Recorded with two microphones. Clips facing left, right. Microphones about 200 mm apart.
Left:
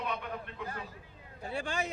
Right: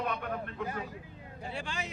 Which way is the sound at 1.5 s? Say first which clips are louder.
Left 5 dB; 50° left (ahead or behind).